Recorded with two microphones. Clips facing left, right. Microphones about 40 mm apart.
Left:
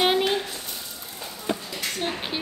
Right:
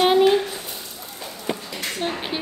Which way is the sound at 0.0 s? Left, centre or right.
Centre.